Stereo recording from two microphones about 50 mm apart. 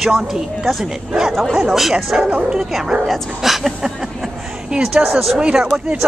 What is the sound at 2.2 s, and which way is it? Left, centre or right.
Speech, right.